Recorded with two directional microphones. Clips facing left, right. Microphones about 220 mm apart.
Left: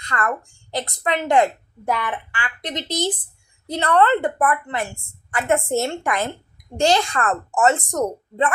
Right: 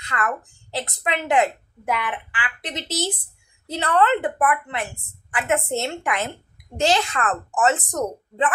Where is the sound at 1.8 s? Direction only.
40° left (ahead or behind).